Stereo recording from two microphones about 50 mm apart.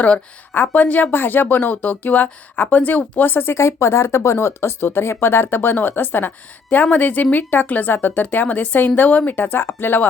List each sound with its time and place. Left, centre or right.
0.5 s speech: left
1.1 s speech: left
3.2 s speech: left